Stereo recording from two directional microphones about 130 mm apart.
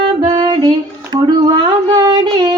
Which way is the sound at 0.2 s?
35° right (ahead or behind).